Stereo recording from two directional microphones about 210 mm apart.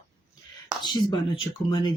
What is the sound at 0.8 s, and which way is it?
Speech, 20° left (ahead or behind).